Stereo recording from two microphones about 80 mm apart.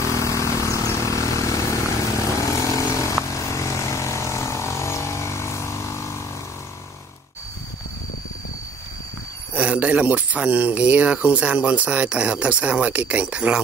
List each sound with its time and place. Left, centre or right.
0.0 s vehicle: left
9.5 s speech: centre